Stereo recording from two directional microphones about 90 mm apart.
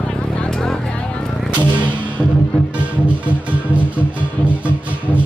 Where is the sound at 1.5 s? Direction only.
15° right (ahead or behind).